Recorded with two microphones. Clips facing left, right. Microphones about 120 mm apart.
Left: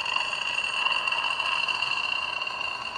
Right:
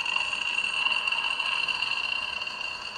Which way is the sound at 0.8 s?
30° left (ahead or behind).